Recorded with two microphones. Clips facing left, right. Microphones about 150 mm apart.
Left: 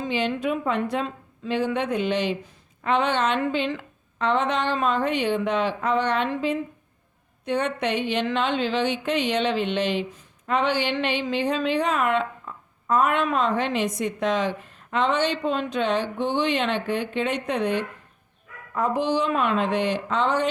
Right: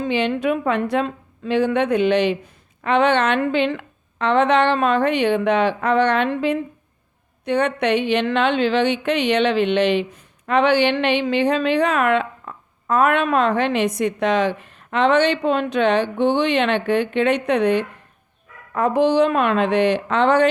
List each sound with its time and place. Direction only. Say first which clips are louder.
0.0 s a woman's voice: right 5 dB; 65° right (ahead or behind)